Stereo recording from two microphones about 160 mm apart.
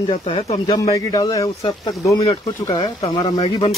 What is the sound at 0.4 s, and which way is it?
Speech, 45° left (ahead or behind).